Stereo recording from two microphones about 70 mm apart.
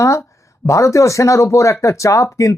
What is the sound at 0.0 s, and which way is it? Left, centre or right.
Speech, left.